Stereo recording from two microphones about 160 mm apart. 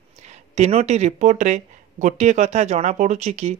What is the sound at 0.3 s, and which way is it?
Speech, 45° right (ahead or behind).